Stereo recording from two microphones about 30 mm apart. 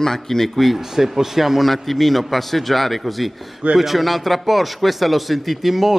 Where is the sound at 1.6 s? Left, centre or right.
Centre.